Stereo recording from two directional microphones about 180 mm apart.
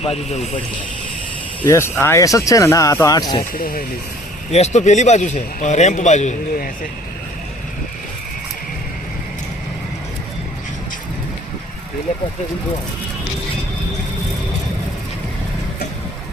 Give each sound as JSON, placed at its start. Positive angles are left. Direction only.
{"t": 0.0, "sound": "a man's voice", "side_deg": 35}
{"t": 1.6, "sound": "speech", "side_deg": 15}
{"t": 3.5, "sound": "speech", "side_deg": 50}
{"t": 4.5, "sound": "a man's voice", "side_deg": 40}